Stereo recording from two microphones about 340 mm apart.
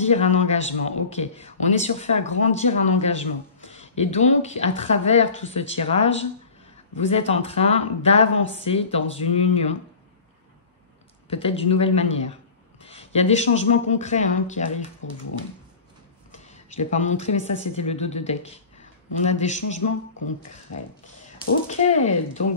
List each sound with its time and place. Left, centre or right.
0.0 s a man's voice: centre
11.2 s a man's voice: centre
15.0 s speech: left
16.7 s a man's voice: left
20.7 s speech: left
21.4 s a man's voice: centre